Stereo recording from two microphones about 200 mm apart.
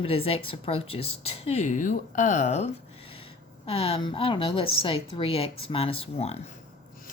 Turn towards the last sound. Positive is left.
turn(degrees=30)  # may be behind; listen again after turning